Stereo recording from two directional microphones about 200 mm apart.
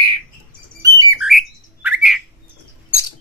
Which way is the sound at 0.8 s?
20° right (ahead or behind).